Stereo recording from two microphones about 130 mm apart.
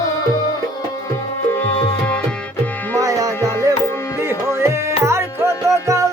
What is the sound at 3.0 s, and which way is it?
Music, 25° right (ahead or behind).